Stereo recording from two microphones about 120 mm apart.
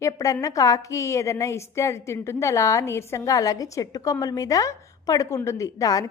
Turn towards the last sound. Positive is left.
turn(degrees=30)  # may be behind; listen again after turning